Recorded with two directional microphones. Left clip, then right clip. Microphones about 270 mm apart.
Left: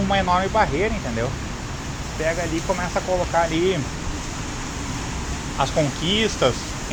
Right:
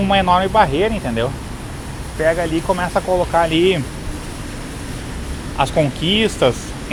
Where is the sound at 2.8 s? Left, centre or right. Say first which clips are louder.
Right 5 dB; right.